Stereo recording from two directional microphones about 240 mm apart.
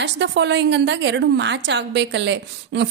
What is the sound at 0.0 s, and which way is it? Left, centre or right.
A woman's voice, right.